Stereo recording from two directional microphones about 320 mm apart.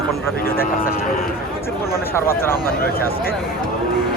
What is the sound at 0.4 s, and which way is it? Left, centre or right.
Vehicle, left.